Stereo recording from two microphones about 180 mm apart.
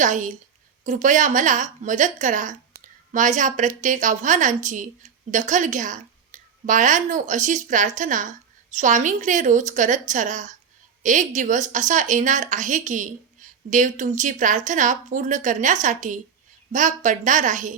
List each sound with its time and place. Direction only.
0.0 s a woman's voice: 45° right (ahead or behind)